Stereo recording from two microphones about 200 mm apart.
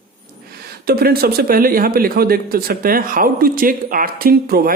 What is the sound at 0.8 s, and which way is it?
Speech, 50° right (ahead or behind).